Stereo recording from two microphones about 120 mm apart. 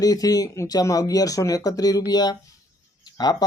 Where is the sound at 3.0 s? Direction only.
35° left (ahead or behind).